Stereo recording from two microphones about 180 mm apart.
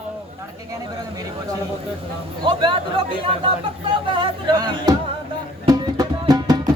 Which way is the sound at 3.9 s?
25° right (ahead or behind).